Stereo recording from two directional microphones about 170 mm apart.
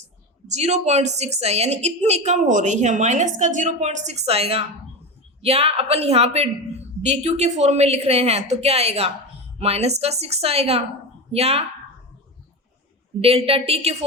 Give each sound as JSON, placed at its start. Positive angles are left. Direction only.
{"t": 0.4, "sound": "a woman's voice", "side_deg": -40}
{"t": 13.2, "sound": "a woman's voice", "side_deg": -35}